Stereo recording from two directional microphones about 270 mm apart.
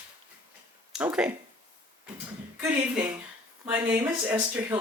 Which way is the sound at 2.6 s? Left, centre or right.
Centre.